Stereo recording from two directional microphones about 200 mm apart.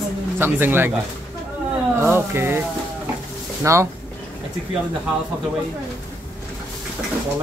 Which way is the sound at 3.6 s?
15° right (ahead or behind).